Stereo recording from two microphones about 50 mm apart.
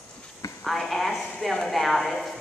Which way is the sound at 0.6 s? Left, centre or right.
Centre.